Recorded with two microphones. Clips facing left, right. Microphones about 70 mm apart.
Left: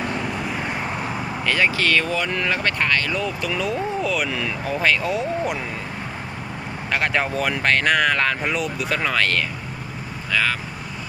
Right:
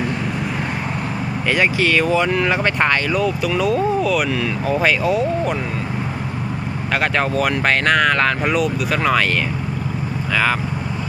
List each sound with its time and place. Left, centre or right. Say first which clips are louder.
1.5 s speech: right 3 dB; centre
3.2 s speech: right 6 dB; centre
6.9 s speech: right 3 dB; centre